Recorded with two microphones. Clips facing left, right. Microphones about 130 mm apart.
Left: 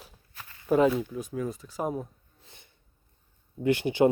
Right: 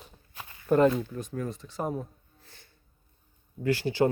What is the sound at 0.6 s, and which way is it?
Speech, 5° left (ahead or behind).